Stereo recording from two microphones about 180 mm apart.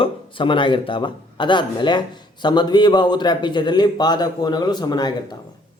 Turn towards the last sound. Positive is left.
turn(degrees=25)  # may be behind; listen again after turning